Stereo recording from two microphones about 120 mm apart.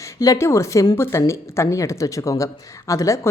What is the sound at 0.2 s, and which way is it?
A woman's voice, 25° left (ahead or behind).